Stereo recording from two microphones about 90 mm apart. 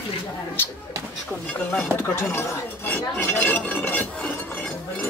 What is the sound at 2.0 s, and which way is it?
Speech, 25° left (ahead or behind).